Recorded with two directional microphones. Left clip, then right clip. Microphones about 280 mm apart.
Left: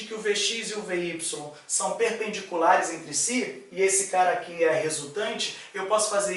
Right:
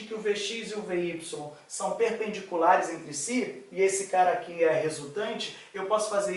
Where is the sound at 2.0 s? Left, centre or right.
Centre.